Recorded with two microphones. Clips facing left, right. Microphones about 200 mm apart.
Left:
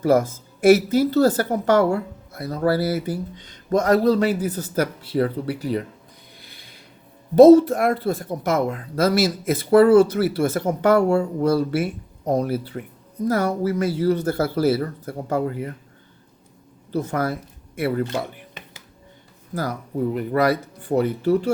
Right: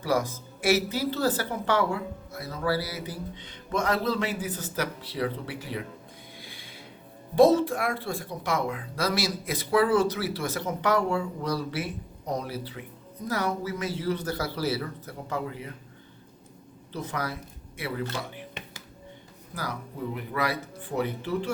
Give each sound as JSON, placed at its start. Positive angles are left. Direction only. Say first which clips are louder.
{"t": 0.6, "sound": "a woman's voice", "louder": "left 10 dB", "side_deg": 50}
{"t": 6.4, "sound": "a sound", "louder": "right 2 dB", "side_deg": 45}
{"t": 7.3, "sound": "a woman's voice", "louder": "left 10 dB", "side_deg": 40}
{"t": 16.9, "sound": "a woman's voice", "louder": "left 9 dB", "side_deg": 45}
{"t": 20.1, "sound": "a woman's voice", "louder": "left 10 dB", "side_deg": 45}